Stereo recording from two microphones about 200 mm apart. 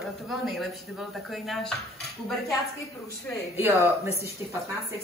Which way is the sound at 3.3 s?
5° left (ahead or behind).